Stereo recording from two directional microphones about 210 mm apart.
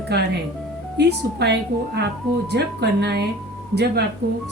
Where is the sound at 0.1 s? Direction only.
50° right (ahead or behind).